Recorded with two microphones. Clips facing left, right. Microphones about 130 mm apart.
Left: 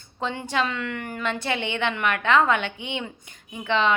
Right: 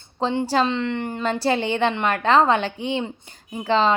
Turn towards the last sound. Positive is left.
turn(degrees=-35)  # may be behind; listen again after turning